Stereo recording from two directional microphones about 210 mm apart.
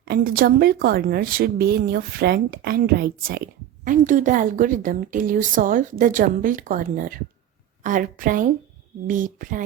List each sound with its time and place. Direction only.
0.0 s a woman's voice: 45° right (ahead or behind)